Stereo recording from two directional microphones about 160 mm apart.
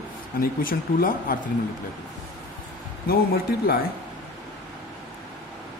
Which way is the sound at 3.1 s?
75° left (ahead or behind).